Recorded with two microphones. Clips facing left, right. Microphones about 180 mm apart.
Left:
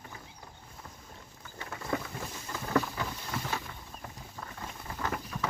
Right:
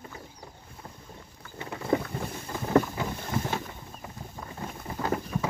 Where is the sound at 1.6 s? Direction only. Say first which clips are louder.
Right 7 dB; 25° right (ahead or behind).